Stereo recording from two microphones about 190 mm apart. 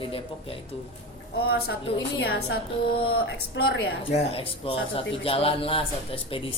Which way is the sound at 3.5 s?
55° left (ahead or behind).